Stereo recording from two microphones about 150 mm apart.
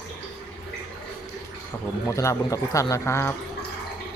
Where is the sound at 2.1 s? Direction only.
20° left (ahead or behind).